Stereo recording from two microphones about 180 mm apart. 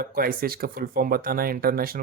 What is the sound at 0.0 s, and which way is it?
Speech, 55° right (ahead or behind).